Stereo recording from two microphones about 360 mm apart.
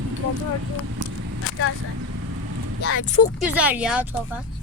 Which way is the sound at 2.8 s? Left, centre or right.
Left.